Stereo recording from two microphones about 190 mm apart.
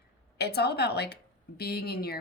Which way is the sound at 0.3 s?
60° left (ahead or behind).